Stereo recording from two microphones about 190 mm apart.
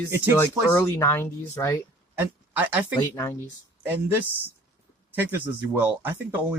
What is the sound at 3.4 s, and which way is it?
Speech, 10° right (ahead or behind).